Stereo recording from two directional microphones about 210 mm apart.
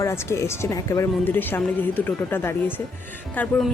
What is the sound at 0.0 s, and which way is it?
Speech, 15° left (ahead or behind).